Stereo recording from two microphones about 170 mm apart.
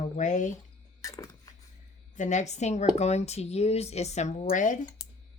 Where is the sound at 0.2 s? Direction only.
45° left (ahead or behind).